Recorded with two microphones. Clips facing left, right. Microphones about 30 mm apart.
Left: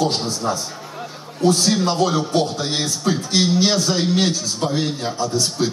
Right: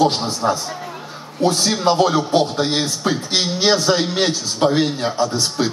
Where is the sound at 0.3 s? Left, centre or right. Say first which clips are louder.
Right 3 dB; right.